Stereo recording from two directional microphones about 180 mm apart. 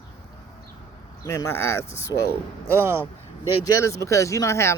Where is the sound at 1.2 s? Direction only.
15° left (ahead or behind).